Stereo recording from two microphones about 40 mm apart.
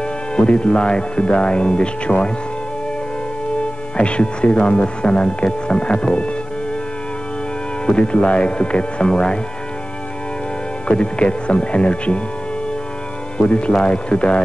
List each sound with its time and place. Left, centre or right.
0.0 s speech: left
3.9 s speech: left
7.8 s speech: left
10.9 s speech: left
13.4 s speech: left